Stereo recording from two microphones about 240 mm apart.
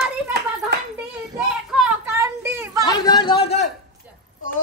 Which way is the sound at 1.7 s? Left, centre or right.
Centre.